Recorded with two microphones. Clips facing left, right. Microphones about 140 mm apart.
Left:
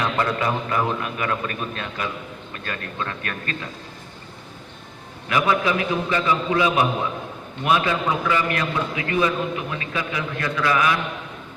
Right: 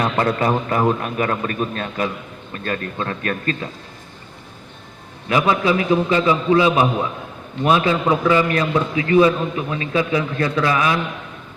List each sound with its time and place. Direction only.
0.0 s a man's voice: 40° right (ahead or behind)
5.3 s a man's voice: 30° right (ahead or behind)